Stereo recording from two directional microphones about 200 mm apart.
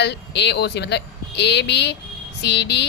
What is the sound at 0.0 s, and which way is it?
Speech, 60° left (ahead or behind).